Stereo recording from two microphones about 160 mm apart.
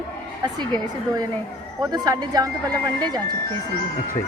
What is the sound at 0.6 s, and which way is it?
A woman's voice, 25° right (ahead or behind).